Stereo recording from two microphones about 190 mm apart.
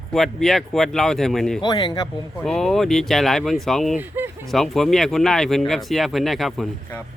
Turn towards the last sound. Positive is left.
turn(degrees=0)  # may be behind; listen again after turning